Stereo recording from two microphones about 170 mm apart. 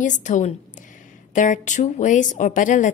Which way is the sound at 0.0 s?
45° left (ahead or behind).